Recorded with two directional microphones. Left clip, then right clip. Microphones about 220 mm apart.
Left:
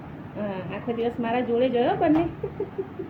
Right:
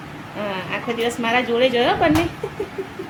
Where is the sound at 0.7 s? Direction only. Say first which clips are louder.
Right 5 dB; 10° right (ahead or behind).